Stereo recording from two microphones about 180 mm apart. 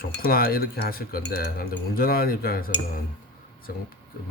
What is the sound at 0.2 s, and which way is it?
Speech, 55° left (ahead or behind).